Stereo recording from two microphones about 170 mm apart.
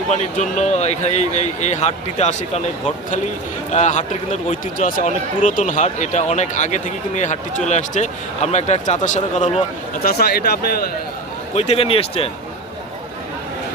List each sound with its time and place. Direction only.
0.1 s speech: 45° left (ahead or behind)
3.7 s speech: 45° left (ahead or behind); by 10.9 s 65° left (ahead or behind)
11.5 s speech: 35° left (ahead or behind)